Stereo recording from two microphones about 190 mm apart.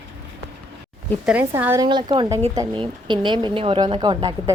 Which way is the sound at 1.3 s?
10° right (ahead or behind).